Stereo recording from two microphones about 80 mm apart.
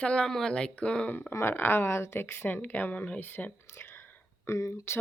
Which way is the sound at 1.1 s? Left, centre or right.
Left.